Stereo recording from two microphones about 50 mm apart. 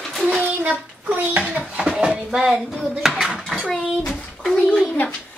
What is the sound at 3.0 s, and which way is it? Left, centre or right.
Dishes, centre.